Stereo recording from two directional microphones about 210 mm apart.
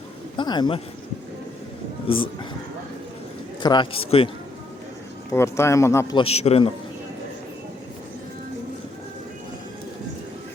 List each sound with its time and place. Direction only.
0.3 s a man's voice: 20° left (ahead or behind)
2.0 s a man's voice: 25° left (ahead or behind)
3.6 s a man's voice: 20° left (ahead or behind)
5.3 s speech: 15° left (ahead or behind)
6.2 s a man's voice: 30° left (ahead or behind)